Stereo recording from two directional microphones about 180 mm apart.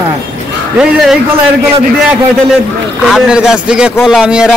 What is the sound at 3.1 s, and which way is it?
A man's voice, 5° right (ahead or behind).